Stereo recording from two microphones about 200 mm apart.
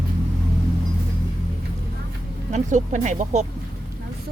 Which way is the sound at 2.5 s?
35° right (ahead or behind).